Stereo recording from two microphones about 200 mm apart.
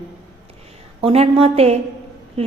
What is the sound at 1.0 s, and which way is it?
Speech, 30° right (ahead or behind).